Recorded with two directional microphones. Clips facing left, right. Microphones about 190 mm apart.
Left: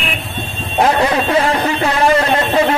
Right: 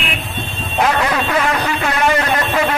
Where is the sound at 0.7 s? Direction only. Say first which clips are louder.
Left 3 dB; 30° left (ahead or behind).